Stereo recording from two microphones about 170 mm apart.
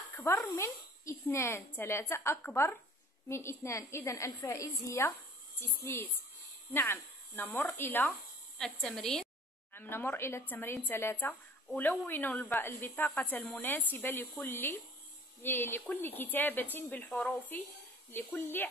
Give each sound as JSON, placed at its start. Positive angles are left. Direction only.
{"t": 0.1, "sound": "a woman's voice", "side_deg": 10}